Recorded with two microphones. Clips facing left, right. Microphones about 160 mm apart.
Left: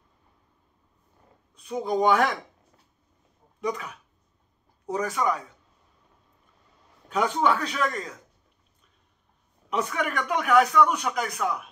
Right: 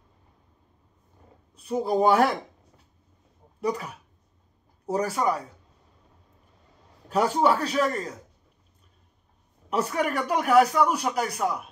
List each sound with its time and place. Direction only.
1.6 s speech: 30° right (ahead or behind)
3.6 s speech: 35° right (ahead or behind)
5.1 s speech: 35° right (ahead or behind)
7.1 s speech: 35° right (ahead or behind)
9.7 s speech: 35° right (ahead or behind)